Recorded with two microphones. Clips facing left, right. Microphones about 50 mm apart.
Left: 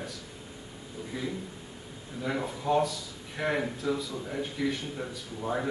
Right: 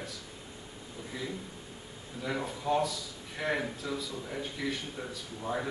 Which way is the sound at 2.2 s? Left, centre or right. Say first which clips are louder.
Left 3 dB; centre.